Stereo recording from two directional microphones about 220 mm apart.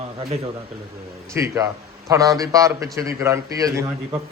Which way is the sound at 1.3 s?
15° right (ahead or behind).